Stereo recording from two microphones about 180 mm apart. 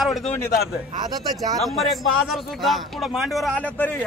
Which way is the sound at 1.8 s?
Centre (ahead or behind).